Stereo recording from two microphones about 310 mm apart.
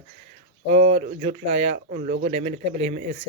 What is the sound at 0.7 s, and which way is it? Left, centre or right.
Speech, right.